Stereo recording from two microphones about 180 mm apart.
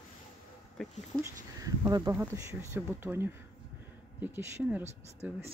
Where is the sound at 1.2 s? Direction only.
20° right (ahead or behind).